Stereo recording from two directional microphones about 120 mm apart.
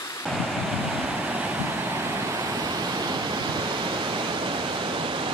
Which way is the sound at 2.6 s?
40° right (ahead or behind).